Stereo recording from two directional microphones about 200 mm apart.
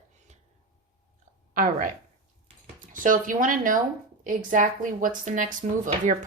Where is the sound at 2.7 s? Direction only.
40° right (ahead or behind).